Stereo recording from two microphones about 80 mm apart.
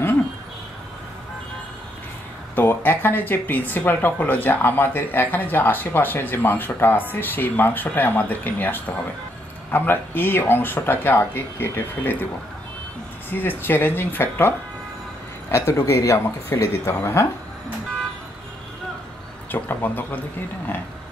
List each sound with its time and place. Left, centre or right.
2.5 s speech: left
13.3 s speech: left
15.5 s speech: left
19.5 s speech: left